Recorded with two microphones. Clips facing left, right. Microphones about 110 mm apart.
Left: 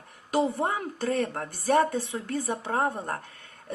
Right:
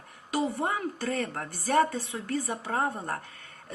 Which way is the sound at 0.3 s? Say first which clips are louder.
Left 3 dB; 20° left (ahead or behind).